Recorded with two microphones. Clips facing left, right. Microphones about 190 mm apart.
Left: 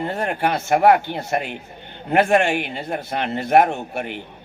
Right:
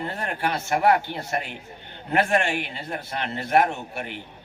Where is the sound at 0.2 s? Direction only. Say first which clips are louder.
Left 5 dB; 50° left (ahead or behind).